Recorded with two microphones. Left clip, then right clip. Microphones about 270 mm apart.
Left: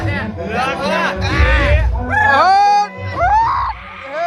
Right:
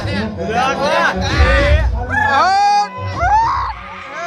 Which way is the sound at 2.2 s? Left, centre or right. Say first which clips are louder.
Left 2 dB; centre.